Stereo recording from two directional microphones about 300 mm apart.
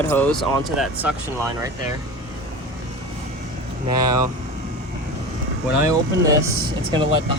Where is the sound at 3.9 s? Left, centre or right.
Centre.